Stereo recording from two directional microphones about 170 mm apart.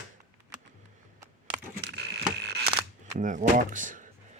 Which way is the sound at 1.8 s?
80° right.